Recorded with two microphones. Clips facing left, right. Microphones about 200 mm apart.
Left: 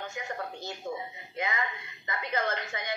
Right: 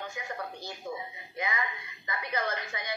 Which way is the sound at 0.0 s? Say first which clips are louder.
Left 1 dB; 25° left (ahead or behind).